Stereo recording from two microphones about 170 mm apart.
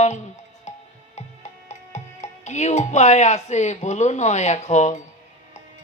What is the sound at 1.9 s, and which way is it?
Speech, 45° left (ahead or behind).